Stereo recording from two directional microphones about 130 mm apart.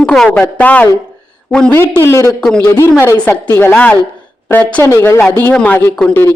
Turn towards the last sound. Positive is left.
turn(degrees=10)  # may be behind; listen again after turning